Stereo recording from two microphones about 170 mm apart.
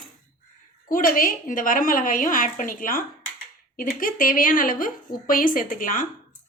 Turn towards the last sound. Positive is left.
turn(degrees=50)  # may be behind; listen again after turning